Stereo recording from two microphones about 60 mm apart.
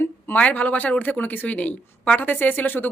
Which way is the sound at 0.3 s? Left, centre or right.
Left.